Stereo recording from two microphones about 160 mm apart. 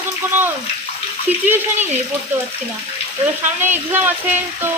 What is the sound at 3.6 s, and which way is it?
Speech, 10° right (ahead or behind).